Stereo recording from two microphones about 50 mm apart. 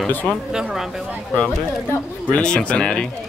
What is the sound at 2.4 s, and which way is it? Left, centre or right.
Speech, left.